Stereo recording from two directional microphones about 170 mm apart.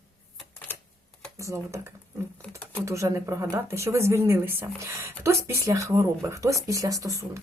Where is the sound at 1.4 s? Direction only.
15° right (ahead or behind).